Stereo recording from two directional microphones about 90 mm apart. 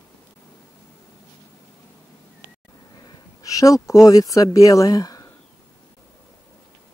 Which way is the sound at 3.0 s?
40° left (ahead or behind).